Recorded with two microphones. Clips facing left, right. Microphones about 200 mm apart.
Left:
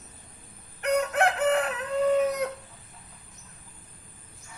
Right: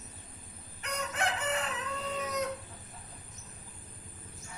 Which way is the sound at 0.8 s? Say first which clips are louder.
Left 12 dB; 60° left (ahead or behind).